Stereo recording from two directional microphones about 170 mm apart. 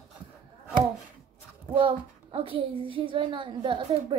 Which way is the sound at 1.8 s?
30° right (ahead or behind).